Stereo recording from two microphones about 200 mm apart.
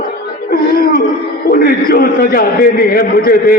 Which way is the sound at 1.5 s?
50° left (ahead or behind).